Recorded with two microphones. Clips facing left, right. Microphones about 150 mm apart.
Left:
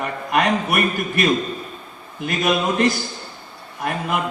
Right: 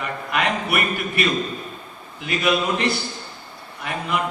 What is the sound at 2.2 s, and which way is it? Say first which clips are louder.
A man's voice: left 1 dB; 45° left (ahead or behind).